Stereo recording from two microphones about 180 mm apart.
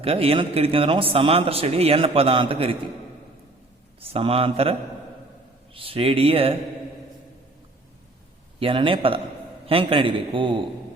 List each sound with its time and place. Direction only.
0.0 s a man's voice: 30° right (ahead or behind)
4.0 s a man's voice: 35° right (ahead or behind)
5.7 s a man's voice: 30° right (ahead or behind)
8.5 s a man's voice: 30° right (ahead or behind)